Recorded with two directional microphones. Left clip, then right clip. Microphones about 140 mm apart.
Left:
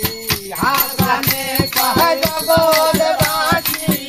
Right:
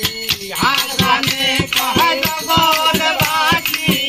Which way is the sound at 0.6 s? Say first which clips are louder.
Right 2 dB; 10° left (ahead or behind).